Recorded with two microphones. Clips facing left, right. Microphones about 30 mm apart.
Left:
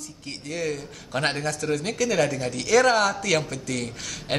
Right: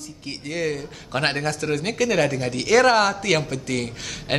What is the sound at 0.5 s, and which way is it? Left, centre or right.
Speech, right.